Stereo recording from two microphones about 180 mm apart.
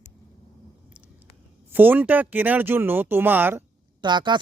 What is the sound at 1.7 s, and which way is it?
Speech, 10° right (ahead or behind).